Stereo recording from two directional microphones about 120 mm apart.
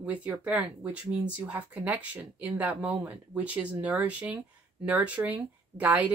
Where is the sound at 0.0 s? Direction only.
15° right (ahead or behind).